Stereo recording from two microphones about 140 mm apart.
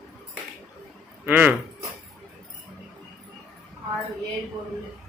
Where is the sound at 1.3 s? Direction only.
10° right (ahead or behind).